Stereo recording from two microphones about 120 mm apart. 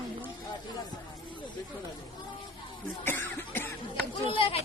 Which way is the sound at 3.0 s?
15° left (ahead or behind).